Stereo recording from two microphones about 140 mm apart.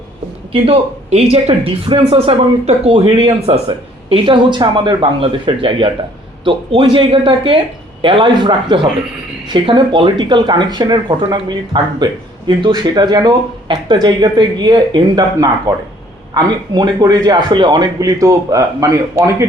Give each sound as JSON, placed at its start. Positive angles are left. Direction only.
{"t": 0.5, "sound": "a man's voice", "side_deg": -45}